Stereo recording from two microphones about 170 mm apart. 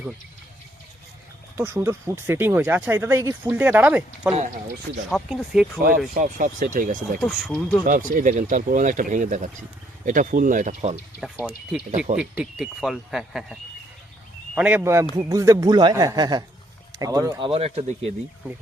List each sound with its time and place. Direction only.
1.5 s speech: 15° right (ahead or behind)
6.1 s speech: 50° right (ahead or behind)
7.2 s speech: centre (ahead or behind)
7.9 s speech: 50° right (ahead or behind)
11.2 s speech: 5° right (ahead or behind)
11.9 s speech: 50° right (ahead or behind)
12.3 s speech: 5° right (ahead or behind); by 17.5 s 20° right (ahead or behind)
17.5 s speech: 35° right (ahead or behind)